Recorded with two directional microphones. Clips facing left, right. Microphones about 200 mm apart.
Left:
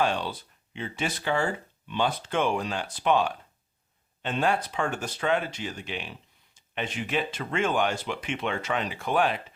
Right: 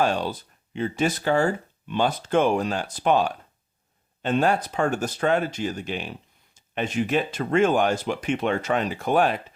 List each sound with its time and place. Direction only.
0.0 s speech: 45° right (ahead or behind)